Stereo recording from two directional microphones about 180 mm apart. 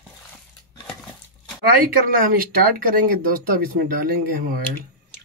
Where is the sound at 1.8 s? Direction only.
50° right (ahead or behind).